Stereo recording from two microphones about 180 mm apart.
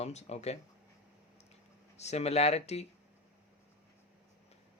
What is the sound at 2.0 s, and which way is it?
Speech, 35° left (ahead or behind).